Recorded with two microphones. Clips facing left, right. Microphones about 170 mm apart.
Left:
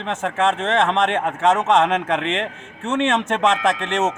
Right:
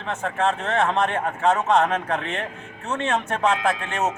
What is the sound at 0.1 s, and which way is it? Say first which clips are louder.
A man's voice: left 3 dB; 90° left.